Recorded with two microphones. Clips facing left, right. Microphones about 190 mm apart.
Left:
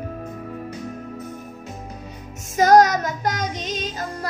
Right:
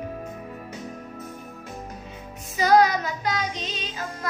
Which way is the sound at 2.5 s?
45° left (ahead or behind).